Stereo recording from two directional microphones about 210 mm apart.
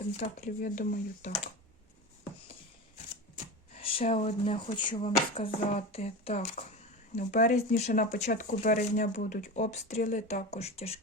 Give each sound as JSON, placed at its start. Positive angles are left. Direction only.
{"t": 0.2, "sound": "speech", "side_deg": 35}
{"t": 3.3, "sound": "speech", "side_deg": 25}